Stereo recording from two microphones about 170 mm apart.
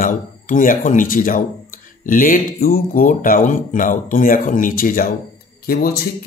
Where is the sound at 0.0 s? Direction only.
50° left (ahead or behind).